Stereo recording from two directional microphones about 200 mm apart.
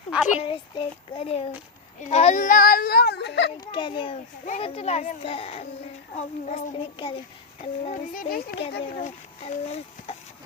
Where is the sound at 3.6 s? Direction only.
25° left (ahead or behind).